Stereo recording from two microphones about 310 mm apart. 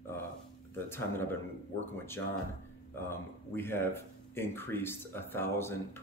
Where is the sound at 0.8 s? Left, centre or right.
Centre.